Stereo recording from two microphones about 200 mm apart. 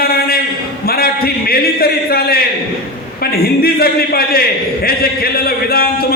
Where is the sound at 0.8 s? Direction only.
50° left (ahead or behind).